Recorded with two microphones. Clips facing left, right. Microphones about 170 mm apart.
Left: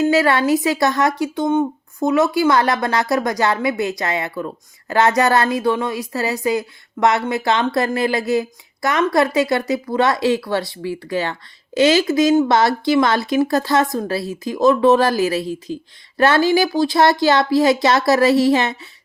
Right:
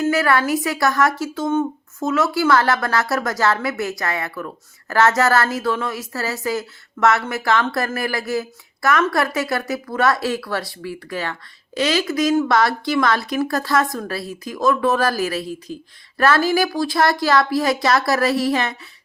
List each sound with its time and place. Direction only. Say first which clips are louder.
0.0 s speech: left 3 dB; 20° left (ahead or behind)